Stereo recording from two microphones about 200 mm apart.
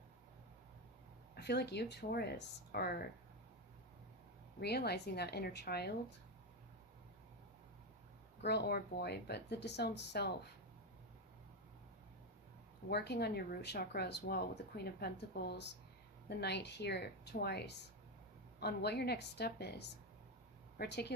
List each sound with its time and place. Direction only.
1.4 s a woman's voice: 55° left (ahead or behind)
4.6 s a woman's voice: 55° left (ahead or behind)
8.4 s speech: 55° left (ahead or behind)
12.9 s speech: 55° left (ahead or behind)